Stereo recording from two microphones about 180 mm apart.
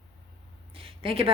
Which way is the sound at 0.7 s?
30° right (ahead or behind).